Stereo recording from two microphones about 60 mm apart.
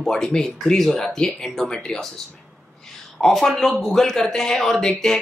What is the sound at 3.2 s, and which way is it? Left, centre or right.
Speech, centre.